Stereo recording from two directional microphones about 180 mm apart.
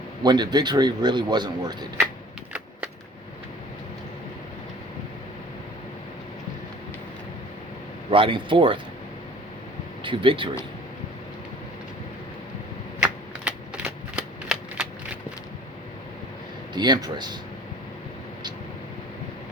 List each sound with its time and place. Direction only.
0.2 s speech: 25° right (ahead or behind)
8.1 s speech: 30° right (ahead or behind)
10.0 s speech: 30° right (ahead or behind)
13.0 s typewriter: 5° right (ahead or behind)
16.7 s speech: 25° right (ahead or behind)